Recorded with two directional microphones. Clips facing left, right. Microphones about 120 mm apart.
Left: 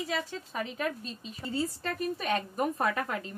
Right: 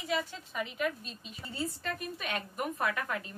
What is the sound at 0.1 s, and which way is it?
A woman's voice, 35° left (ahead or behind).